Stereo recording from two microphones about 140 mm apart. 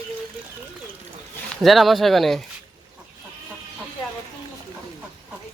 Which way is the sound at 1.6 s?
Centre (ahead or behind).